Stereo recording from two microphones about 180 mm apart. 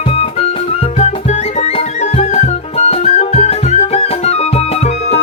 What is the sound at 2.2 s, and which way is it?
Music, 40° left (ahead or behind).